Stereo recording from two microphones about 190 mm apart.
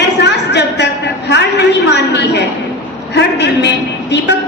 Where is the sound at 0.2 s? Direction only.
65° left (ahead or behind).